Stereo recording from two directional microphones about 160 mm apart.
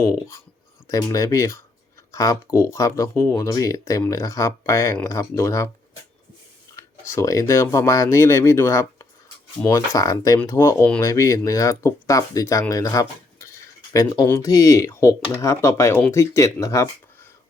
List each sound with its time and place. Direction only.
0.0 s speech: 15° left (ahead or behind)
6.7 s speech: 20° left (ahead or behind)